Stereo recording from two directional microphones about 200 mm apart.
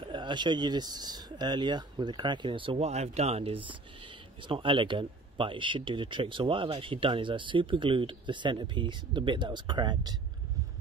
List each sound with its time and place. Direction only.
0.1 s speech: 25° right (ahead or behind)